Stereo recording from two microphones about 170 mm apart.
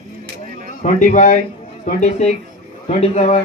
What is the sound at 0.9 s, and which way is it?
A man's voice, 45° left (ahead or behind).